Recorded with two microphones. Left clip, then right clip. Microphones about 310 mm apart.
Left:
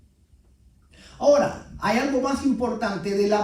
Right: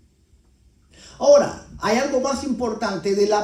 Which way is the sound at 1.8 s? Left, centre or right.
Right.